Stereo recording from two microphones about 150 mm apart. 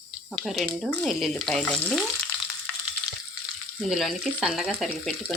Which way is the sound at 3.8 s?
Centre (ahead or behind).